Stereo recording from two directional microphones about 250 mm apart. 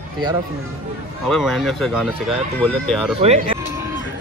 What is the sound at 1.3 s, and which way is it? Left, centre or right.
Speech, centre.